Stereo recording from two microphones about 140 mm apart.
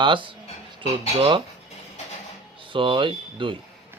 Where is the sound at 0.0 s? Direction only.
35° right (ahead or behind).